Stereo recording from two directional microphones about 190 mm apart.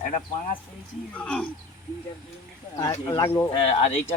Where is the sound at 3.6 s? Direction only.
35° left (ahead or behind).